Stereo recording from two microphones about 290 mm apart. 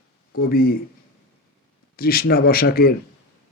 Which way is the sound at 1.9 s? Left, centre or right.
Left.